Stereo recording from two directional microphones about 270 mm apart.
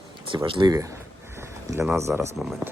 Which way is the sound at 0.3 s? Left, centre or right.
Centre.